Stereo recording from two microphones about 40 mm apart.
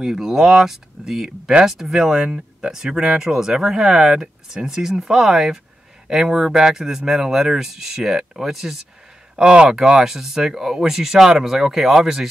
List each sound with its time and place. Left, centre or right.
0.0 s speech: centre
9.4 s speech: right